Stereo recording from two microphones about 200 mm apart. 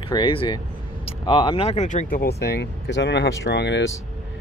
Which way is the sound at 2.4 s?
55° left (ahead or behind).